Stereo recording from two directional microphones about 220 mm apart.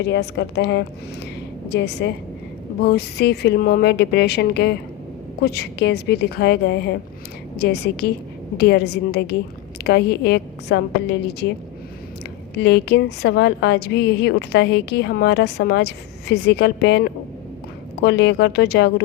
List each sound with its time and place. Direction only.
0.0 s a woman's voice: 50° left (ahead or behind)
12.5 s a woman's voice: 50° left (ahead or behind)